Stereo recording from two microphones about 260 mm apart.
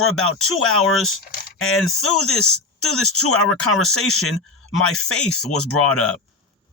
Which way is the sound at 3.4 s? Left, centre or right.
Centre.